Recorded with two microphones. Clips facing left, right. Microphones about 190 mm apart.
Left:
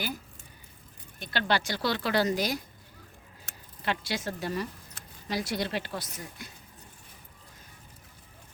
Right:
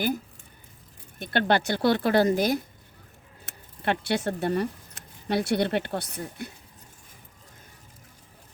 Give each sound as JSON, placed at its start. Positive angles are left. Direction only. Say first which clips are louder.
{"t": 1.2, "sound": "speech", "louder": "right 5 dB", "side_deg": -55}
{"t": 3.8, "sound": "speech", "louder": "right 6 dB", "side_deg": -60}